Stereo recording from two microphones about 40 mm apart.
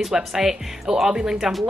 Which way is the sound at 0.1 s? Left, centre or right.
Centre.